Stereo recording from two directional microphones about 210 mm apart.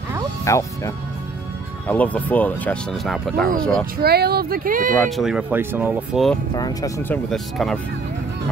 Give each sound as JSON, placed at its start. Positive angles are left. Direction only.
{"t": 0.5, "sound": "speech", "side_deg": 15}
{"t": 4.0, "sound": "speech", "side_deg": -50}
{"t": 5.1, "sound": "speech", "side_deg": -5}
{"t": 6.5, "sound": "speech", "side_deg": 15}